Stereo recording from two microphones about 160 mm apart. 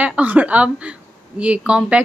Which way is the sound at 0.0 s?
10° right (ahead or behind).